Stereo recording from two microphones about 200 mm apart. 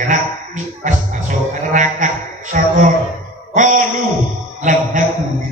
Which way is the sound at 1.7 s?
40° right (ahead or behind).